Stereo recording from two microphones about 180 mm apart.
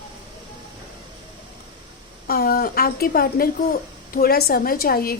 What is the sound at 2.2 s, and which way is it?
A woman's voice, 55° left (ahead or behind).